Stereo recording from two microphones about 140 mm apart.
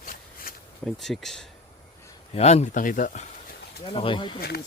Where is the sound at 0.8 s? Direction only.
Centre (ahead or behind).